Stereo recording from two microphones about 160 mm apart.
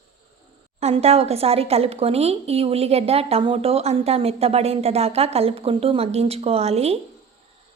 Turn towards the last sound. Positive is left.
turn(degrees=-40)  # may be behind; listen again after turning